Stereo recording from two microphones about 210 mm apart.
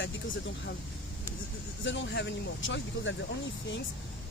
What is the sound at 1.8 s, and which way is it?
Speech, 60° left (ahead or behind).